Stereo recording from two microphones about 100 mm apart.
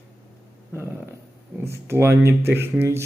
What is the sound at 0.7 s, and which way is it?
Speech, 25° right (ahead or behind).